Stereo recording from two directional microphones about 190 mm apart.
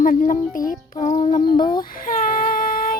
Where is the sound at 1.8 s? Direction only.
45° left (ahead or behind).